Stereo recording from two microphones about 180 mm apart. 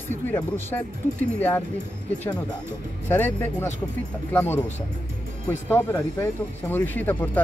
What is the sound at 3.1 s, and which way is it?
Speech, 10° left (ahead or behind).